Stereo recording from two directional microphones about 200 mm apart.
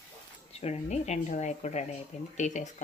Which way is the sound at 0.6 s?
35° left (ahead or behind).